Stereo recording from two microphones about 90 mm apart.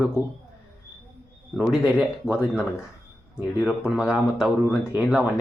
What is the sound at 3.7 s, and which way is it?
Speech, 10° right (ahead or behind).